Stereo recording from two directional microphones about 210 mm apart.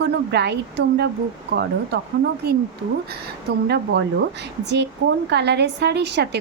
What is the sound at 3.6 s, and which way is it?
Speech, 55° right (ahead or behind).